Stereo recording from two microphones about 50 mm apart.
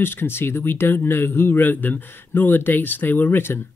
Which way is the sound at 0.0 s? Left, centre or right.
Left.